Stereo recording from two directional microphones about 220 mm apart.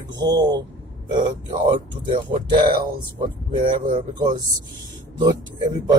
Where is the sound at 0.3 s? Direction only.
20° right (ahead or behind).